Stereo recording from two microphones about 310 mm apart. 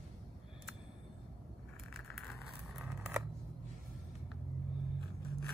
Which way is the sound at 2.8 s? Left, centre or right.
Centre.